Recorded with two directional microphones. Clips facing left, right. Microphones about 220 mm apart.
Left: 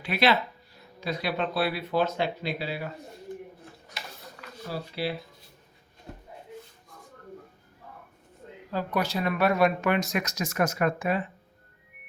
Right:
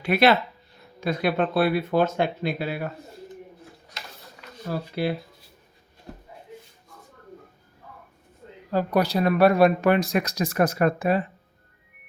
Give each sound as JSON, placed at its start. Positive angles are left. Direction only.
{"t": 0.0, "sound": "speech", "side_deg": -50}
{"t": 4.7, "sound": "speech", "side_deg": -50}
{"t": 8.7, "sound": "speech", "side_deg": -35}